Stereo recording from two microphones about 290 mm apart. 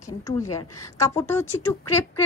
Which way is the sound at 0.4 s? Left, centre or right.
Centre.